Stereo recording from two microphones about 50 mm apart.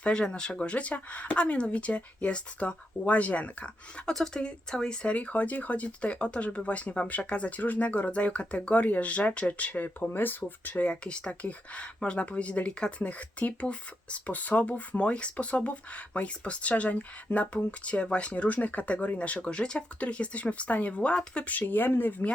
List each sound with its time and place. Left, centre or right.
0.0 s speech: centre
4.0 s speech: centre
5.1 s speech: left
9.8 s speech: left
10.8 s speech: left
21.6 s speech: left